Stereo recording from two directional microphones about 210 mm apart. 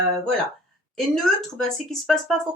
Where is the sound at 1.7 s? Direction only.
Centre (ahead or behind).